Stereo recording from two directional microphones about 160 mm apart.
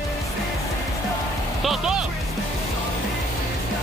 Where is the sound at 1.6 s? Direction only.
Centre (ahead or behind).